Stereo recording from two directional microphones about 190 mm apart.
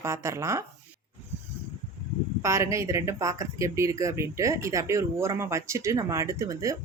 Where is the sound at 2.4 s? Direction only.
15° right (ahead or behind).